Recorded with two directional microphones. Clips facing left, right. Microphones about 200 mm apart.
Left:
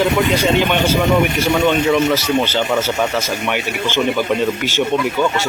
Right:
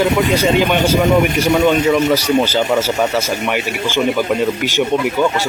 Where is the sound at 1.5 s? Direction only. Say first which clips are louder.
Right 2 dB; centre (ahead or behind).